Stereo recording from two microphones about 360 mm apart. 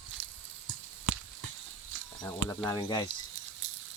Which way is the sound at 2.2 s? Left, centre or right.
Centre.